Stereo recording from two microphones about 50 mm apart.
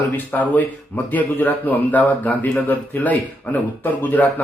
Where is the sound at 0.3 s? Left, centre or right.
Left.